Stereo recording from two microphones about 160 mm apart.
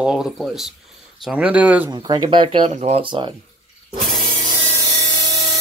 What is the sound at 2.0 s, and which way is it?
Speech, 30° right (ahead or behind).